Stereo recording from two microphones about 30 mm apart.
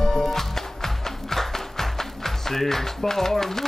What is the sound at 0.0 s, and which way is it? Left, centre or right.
Music, centre.